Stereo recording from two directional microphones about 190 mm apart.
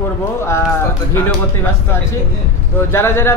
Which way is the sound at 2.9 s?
15° left (ahead or behind).